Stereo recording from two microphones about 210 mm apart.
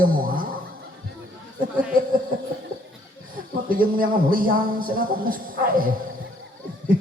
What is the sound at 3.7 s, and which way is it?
A man's voice, 40° right (ahead or behind).